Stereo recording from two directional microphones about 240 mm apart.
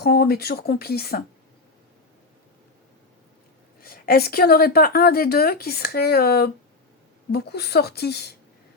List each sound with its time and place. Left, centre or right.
0.0 s a woman's voice: left
3.8 s a woman's voice: left